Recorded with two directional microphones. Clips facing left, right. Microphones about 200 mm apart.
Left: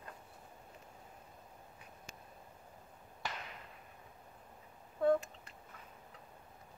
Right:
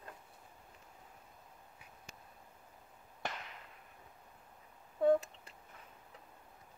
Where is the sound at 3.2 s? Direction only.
55° right (ahead or behind).